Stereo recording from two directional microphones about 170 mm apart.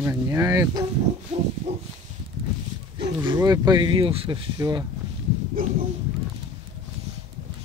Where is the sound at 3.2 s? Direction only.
20° right (ahead or behind).